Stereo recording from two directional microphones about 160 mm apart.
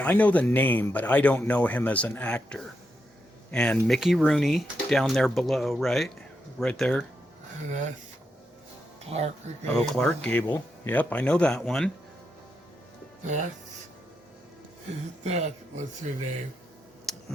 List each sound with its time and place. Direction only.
0.0 s speech: 10° left (ahead or behind)
7.7 s speech: 50° right (ahead or behind)
9.0 s speech: 40° right (ahead or behind)
9.7 s speech: 5° left (ahead or behind)
13.2 s speech: 50° right (ahead or behind)
15.2 s speech: 45° right (ahead or behind)
17.1 s clicking: centre (ahead or behind)